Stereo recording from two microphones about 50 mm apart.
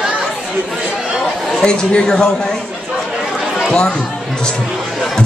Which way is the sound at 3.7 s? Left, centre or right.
Centre.